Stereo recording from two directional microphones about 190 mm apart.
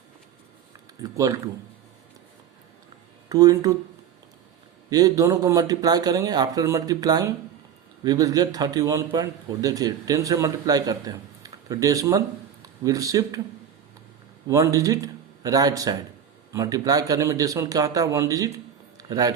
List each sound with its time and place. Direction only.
1.0 s a man's voice: 15° right (ahead or behind)
3.2 s a man's voice: 20° right (ahead or behind)
4.9 s a man's voice: 20° right (ahead or behind)
14.4 s a man's voice: 15° right (ahead or behind)
18.9 s a sound: 20° right (ahead or behind)